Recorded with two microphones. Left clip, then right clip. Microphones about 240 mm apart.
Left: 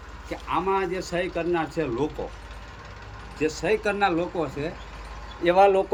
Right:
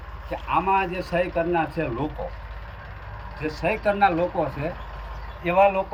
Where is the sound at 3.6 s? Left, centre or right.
Centre.